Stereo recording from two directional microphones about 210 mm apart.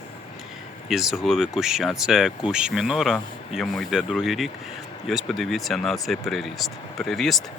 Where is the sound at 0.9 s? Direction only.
Centre (ahead or behind).